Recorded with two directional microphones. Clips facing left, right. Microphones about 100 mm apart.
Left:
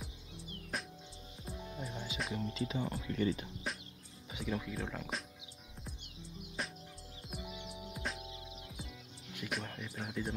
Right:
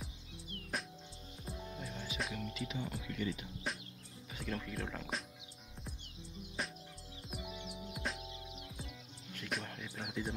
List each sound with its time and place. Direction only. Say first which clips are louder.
0.7 s music: even; centre (ahead or behind)
1.8 s music: left 2 dB; 25° left (ahead or behind)
2.3 s speech: left 4 dB; 30° left (ahead or behind)
3.7 s music: even; centre (ahead or behind)
4.4 s speech: left 3 dB; 5° left (ahead or behind)
6.6 s music: even; centre (ahead or behind)
9.5 s speech: even; centre (ahead or behind)